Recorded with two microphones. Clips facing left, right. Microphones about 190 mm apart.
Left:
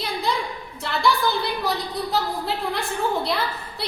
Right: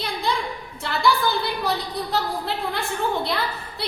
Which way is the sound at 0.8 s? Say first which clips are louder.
Even; centre (ahead or behind).